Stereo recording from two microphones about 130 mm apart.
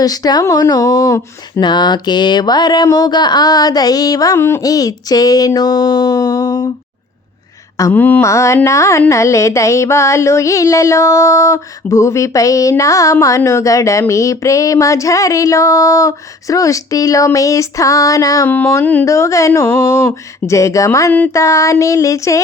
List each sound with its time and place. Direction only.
0.0 s speech: 30° left (ahead or behind)
7.8 s speech: 20° left (ahead or behind)
18.4 s speech: 15° left (ahead or behind)